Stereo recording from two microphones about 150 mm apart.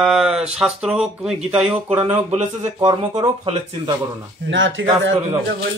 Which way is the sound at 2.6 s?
30° right (ahead or behind).